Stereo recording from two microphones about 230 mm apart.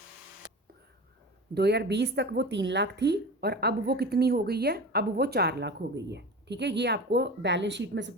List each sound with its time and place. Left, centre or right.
1.5 s speech: right